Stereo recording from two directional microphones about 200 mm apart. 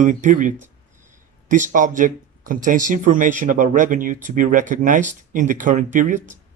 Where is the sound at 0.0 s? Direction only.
40° right (ahead or behind).